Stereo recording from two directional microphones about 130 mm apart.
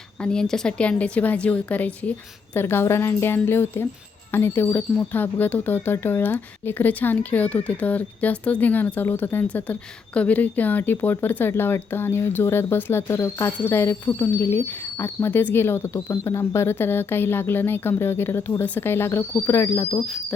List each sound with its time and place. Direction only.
0.2 s speech: 5° left (ahead or behind)